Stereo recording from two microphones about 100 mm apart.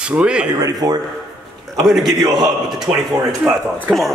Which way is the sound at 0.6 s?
40° right (ahead or behind).